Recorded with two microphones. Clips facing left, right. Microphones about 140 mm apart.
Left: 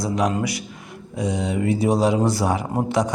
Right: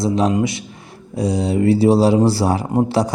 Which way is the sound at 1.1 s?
35° right (ahead or behind).